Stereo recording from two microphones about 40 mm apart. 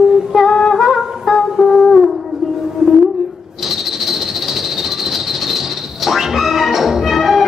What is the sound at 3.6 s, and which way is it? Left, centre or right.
Train, centre.